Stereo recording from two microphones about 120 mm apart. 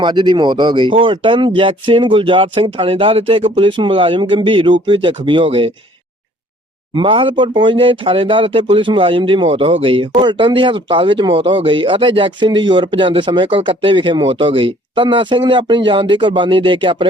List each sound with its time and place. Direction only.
0.0 s speech: 40° right (ahead or behind)
6.9 s speech: 45° right (ahead or behind)